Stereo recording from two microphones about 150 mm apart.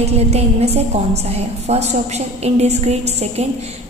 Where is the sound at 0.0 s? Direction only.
45° right (ahead or behind).